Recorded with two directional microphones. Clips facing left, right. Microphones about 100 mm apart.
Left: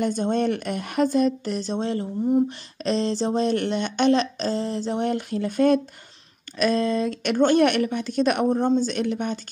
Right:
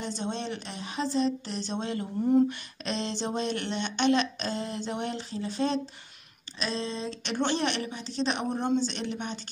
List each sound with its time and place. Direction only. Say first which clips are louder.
0.0 s speech: left 11 dB; 50° left (ahead or behind)